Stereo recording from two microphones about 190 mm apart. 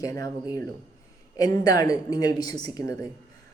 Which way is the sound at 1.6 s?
20° left (ahead or behind).